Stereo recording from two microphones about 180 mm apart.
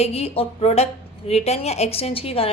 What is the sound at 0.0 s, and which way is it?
A woman's voice, 35° left (ahead or behind).